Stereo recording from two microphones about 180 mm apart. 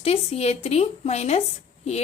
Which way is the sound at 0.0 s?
35° left (ahead or behind).